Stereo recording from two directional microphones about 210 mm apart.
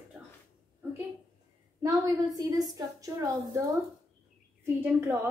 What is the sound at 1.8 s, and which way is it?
A woman's voice, 15° right (ahead or behind).